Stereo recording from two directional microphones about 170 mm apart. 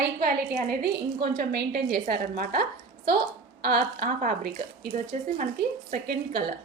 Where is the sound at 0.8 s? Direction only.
70° right (ahead or behind).